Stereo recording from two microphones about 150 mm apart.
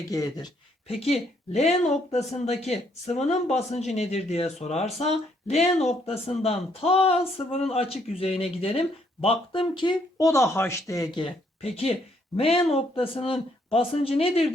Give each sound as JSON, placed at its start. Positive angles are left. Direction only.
{"t": 0.1, "sound": "speech", "side_deg": 25}
{"t": 0.9, "sound": "speech", "side_deg": 45}
{"t": 11.6, "sound": "speech", "side_deg": 45}